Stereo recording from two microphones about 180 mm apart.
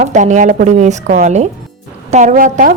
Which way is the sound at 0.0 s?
40° right (ahead or behind).